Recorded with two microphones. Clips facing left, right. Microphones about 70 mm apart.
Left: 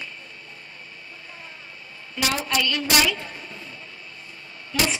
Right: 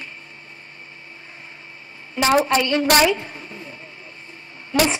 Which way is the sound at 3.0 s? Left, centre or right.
Right.